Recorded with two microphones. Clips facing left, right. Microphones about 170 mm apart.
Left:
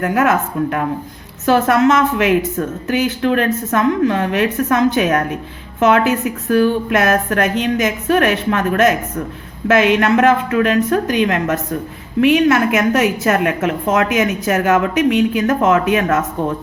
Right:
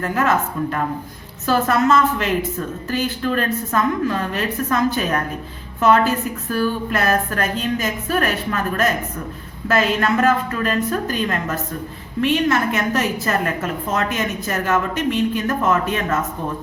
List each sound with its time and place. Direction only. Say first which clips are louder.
0.0 s a woman's voice: left 4 dB; 65° left (ahead or behind)